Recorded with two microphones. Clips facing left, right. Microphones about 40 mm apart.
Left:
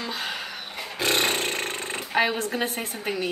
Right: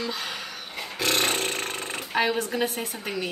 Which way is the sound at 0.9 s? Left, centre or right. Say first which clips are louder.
Left 1 dB; centre.